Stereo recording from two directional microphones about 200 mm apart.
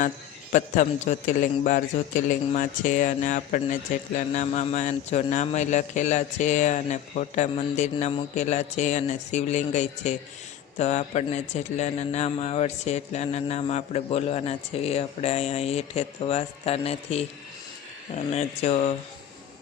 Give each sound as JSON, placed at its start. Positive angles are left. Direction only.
{"t": 0.5, "sound": "a man's voice", "side_deg": 40}